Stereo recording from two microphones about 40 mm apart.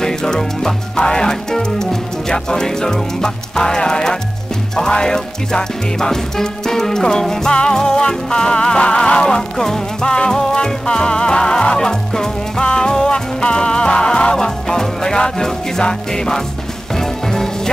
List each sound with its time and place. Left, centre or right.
0.0 s speech: centre
1.7 s music: centre